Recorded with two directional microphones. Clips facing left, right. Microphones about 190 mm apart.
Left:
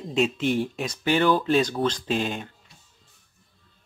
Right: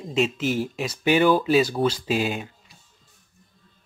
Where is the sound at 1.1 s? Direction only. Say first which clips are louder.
Right 2 dB; 10° right (ahead or behind).